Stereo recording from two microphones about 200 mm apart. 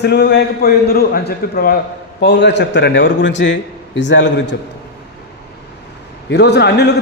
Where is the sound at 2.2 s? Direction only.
60° left (ahead or behind).